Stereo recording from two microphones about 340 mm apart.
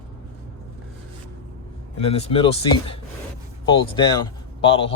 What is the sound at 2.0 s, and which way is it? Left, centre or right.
A man's voice, centre.